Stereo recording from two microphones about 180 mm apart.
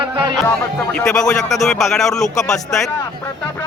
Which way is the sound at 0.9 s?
5° left (ahead or behind).